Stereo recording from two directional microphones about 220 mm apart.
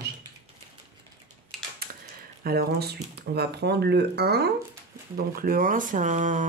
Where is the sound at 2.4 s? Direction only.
45° right (ahead or behind).